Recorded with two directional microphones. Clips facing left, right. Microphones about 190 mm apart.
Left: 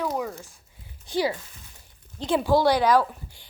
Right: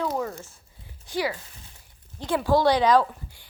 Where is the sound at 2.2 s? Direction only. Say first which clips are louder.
Left 1 dB; 15° left (ahead or behind).